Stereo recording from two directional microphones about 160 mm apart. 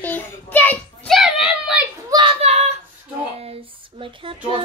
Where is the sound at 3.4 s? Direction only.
35° right (ahead or behind).